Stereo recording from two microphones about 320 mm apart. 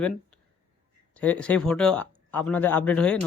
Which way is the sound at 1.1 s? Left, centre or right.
Centre.